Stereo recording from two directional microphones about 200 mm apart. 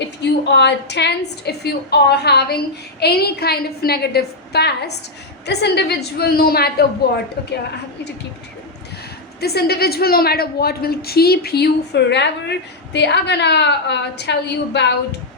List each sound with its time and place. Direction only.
0.2 s a woman's voice: 60° left (ahead or behind)
9.4 s a woman's voice: 50° left (ahead or behind)